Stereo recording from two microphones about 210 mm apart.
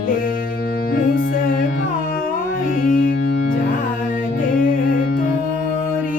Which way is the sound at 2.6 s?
40° left (ahead or behind).